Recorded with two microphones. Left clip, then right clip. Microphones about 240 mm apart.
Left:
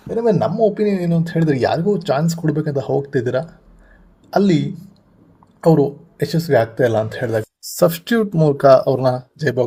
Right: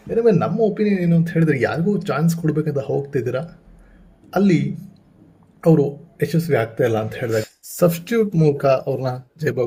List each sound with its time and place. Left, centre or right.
0.1 s speech: centre